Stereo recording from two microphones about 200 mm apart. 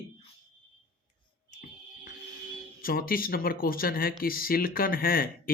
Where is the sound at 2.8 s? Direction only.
45° left (ahead or behind).